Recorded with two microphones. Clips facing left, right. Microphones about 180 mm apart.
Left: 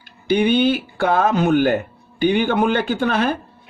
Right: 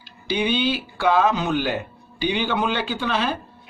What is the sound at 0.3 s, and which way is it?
A man's voice, 55° left (ahead or behind).